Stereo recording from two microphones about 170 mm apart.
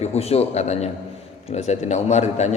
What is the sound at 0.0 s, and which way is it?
A man's voice, 40° left (ahead or behind).